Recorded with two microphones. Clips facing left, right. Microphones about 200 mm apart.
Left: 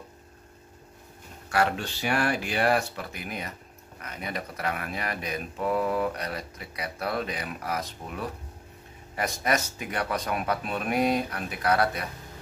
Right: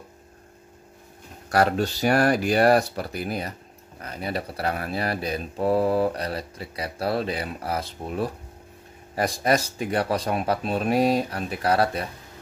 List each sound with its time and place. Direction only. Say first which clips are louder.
1.5 s speech: right 5 dB; 40° right (ahead or behind)